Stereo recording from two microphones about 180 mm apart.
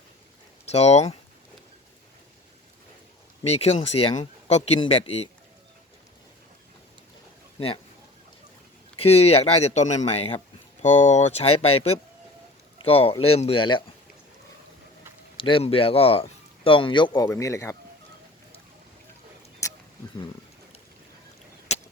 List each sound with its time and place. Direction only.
0.7 s speech: 35° left (ahead or behind)
3.4 s speech: 35° left (ahead or behind)
7.6 s speech: 35° left (ahead or behind)
9.0 s speech: 35° left (ahead or behind)
15.4 s speech: 30° left (ahead or behind)
17.2 s speech: 15° left (ahead or behind)
19.6 s a sound: 15° left (ahead or behind)
21.7 s a sound: 35° left (ahead or behind)